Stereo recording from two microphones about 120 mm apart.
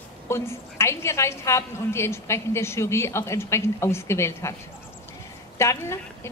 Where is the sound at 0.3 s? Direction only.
20° left (ahead or behind).